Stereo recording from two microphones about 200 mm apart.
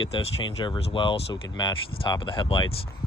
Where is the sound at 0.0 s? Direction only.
25° left (ahead or behind).